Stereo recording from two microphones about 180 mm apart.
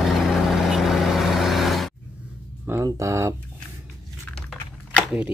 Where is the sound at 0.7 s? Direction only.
Centre (ahead or behind).